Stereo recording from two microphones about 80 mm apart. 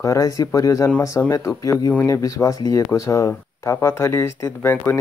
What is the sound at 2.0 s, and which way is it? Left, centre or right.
Speech, left.